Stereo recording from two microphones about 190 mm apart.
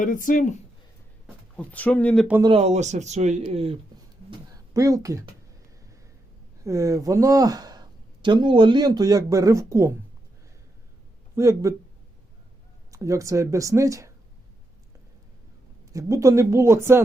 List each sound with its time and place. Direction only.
0.0 s speech: 45° left (ahead or behind)
1.5 s speech: 10° left (ahead or behind)
2.4 s speech: 30° right (ahead or behind)
4.3 s speech: 15° right (ahead or behind)
6.7 s speech: 15° right (ahead or behind)
11.3 s speech: 15° right (ahead or behind)
12.9 s speech: 15° right (ahead or behind)
15.9 s speech: 15° right (ahead or behind)